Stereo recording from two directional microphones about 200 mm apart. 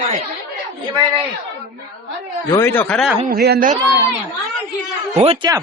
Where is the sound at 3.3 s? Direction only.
50° right (ahead or behind).